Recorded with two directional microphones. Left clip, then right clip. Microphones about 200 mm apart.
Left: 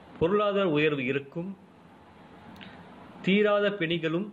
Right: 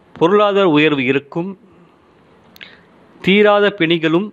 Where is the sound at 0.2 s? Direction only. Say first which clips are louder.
Right 13 dB; 50° right (ahead or behind).